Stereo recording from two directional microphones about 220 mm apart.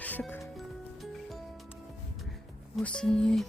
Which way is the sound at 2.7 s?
5° left (ahead or behind).